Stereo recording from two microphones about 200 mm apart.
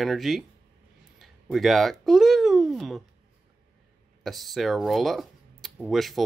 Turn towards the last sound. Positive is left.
turn(degrees=0)  # may be behind; listen again after turning